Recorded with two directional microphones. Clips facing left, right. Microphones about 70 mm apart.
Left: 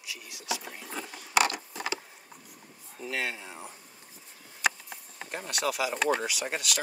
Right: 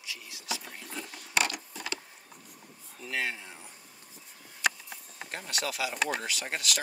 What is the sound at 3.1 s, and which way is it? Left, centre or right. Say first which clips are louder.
Speech: even; centre.